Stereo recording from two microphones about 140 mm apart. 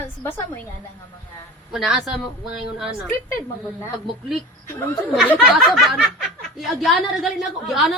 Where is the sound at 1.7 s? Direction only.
Centre (ahead or behind).